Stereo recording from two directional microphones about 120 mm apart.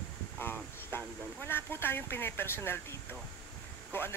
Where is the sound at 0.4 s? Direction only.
15° left (ahead or behind).